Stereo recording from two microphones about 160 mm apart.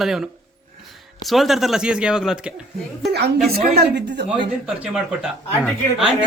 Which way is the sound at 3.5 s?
85° right.